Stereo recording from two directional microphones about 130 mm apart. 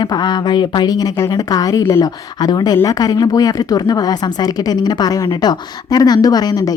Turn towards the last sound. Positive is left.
turn(degrees=30)  # may be behind; listen again after turning